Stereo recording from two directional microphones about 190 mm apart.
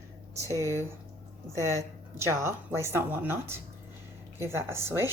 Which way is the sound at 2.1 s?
15° right (ahead or behind).